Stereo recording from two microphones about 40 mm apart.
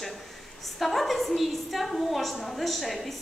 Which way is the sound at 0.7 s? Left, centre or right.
Centre.